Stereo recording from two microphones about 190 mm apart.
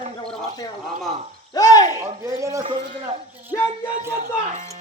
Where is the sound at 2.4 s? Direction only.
15° right (ahead or behind).